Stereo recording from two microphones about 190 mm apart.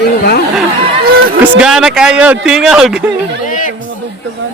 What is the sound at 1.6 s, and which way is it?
Speech, 5° right (ahead or behind).